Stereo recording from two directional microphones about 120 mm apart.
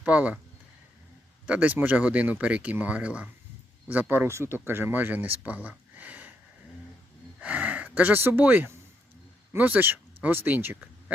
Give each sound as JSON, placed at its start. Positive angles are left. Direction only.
{"t": 0.0, "sound": "speech", "side_deg": -10}
{"t": 1.5, "sound": "speech", "side_deg": -10}
{"t": 7.4, "sound": "speech", "side_deg": -10}